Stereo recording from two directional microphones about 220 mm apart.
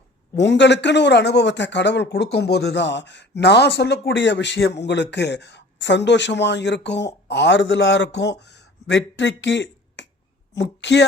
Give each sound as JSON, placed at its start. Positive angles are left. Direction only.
{"t": 0.3, "sound": "speech", "side_deg": 55}
{"t": 8.5, "sound": "finger snapping", "side_deg": 55}
{"t": 10.5, "sound": "speech", "side_deg": 50}